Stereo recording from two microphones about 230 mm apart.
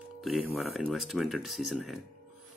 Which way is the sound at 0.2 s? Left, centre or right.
Centre.